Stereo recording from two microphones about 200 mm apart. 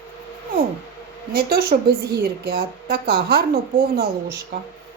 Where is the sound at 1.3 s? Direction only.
50° right (ahead or behind).